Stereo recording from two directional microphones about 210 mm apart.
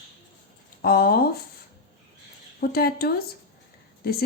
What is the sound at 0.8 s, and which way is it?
Speech, 45° left (ahead or behind).